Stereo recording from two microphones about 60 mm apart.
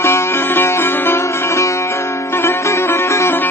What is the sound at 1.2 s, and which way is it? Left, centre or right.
Music, left.